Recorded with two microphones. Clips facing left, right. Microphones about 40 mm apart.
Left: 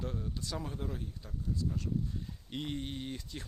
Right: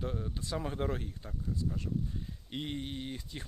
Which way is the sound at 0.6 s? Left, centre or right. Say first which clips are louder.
Right 5 dB; right.